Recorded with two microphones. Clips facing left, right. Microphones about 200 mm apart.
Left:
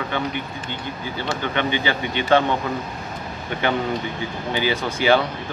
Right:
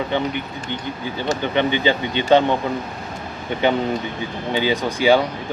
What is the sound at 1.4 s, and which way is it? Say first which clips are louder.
Speech: right 4 dB; 20° right (ahead or behind).